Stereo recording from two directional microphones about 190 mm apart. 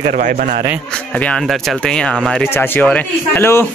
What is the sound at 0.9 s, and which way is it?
A man's voice, 5° left (ahead or behind).